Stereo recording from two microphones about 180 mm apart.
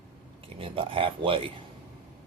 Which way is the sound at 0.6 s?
30° right (ahead or behind).